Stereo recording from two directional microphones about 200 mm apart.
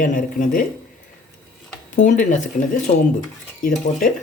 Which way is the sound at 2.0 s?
40° left (ahead or behind).